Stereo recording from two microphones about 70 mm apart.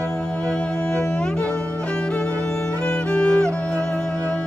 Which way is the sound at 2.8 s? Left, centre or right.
Centre.